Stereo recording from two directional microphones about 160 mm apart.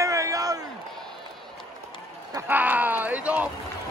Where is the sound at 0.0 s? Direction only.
20° right (ahead or behind).